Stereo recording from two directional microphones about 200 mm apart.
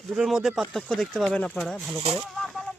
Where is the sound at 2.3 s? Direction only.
Centre (ahead or behind).